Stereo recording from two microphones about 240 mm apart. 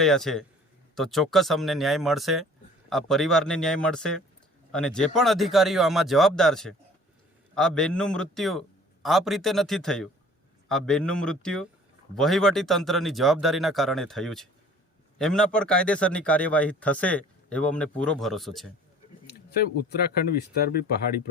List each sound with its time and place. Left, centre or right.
0.0 s a man's voice: centre
20.6 s speech: left